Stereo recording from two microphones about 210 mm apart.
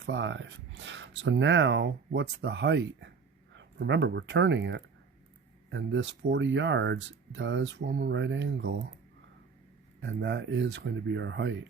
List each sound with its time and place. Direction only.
0.0 s speech: 60° right (ahead or behind)
10.0 s speech: 60° right (ahead or behind)